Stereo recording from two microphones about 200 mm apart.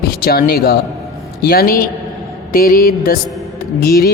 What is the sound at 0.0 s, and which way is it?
A man's voice, 50° left (ahead or behind).